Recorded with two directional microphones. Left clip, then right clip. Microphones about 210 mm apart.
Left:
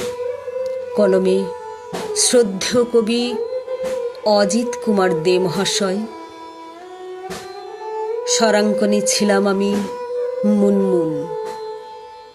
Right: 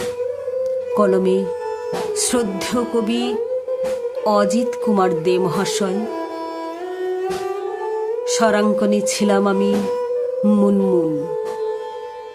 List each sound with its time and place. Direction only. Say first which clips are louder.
0.6 s music: even; 10° right (ahead or behind)
2.1 s speech: left 9 dB; 10° right (ahead or behind)
8.3 s speech: left 1 dB; 10° right (ahead or behind)